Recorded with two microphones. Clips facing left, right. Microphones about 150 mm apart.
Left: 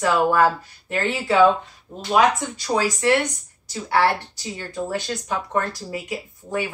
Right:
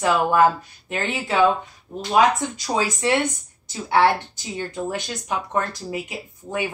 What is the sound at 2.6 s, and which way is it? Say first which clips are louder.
Speech: left 3 dB; 20° right (ahead or behind).